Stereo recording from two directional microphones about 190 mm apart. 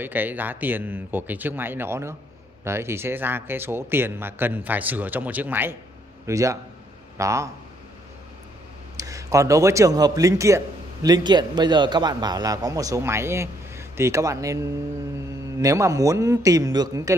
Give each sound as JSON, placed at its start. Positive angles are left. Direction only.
{"t": 0.0, "sound": "a man's voice", "side_deg": -10}
{"t": 8.9, "sound": "a man's voice", "side_deg": -15}